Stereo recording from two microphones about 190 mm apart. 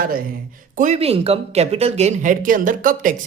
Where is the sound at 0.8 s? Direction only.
35° right (ahead or behind).